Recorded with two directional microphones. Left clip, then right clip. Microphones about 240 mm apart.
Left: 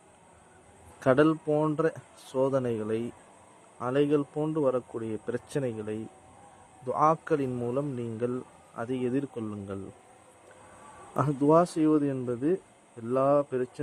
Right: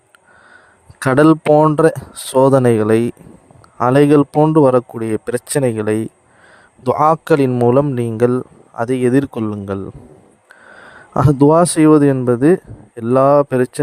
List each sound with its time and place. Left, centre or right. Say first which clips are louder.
0.9 s a man's voice: right 12 dB; right
11.1 s a man's voice: right 12 dB; right